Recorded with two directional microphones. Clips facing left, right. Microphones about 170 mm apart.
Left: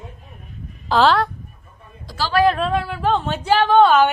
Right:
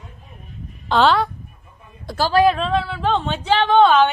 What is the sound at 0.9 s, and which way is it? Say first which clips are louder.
Speech: even; centre (ahead or behind).